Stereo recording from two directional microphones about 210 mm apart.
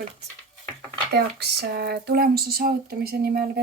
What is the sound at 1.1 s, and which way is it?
Speech, 50° right (ahead or behind).